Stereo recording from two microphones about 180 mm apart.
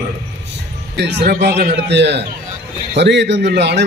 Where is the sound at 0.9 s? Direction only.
70° right (ahead or behind).